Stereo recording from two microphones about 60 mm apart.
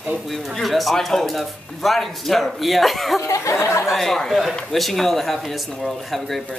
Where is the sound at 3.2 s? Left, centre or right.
Left.